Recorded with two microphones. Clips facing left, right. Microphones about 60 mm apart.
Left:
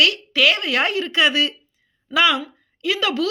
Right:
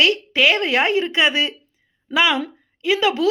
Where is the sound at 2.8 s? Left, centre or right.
Right.